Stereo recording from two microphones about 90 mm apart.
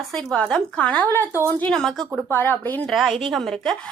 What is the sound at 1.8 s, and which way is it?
Speech, 5° left (ahead or behind).